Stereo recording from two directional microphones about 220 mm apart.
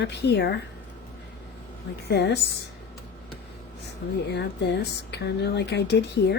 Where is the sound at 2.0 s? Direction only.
50° left (ahead or behind).